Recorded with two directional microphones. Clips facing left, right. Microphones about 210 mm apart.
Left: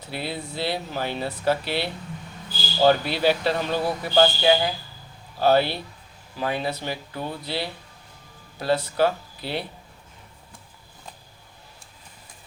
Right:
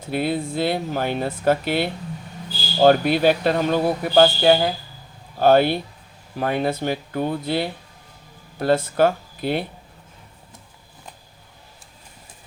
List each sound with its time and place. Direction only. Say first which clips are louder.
0.0 s speech: right 8 dB; 50° right (ahead or behind)